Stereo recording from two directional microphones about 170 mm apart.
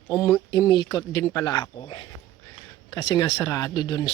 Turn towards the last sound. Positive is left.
turn(degrees=30)  # may be behind; listen again after turning